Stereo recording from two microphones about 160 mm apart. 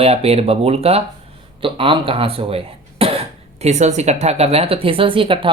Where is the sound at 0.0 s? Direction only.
40° right (ahead or behind).